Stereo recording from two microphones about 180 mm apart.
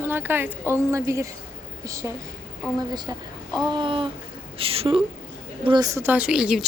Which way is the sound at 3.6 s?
25° right (ahead or behind).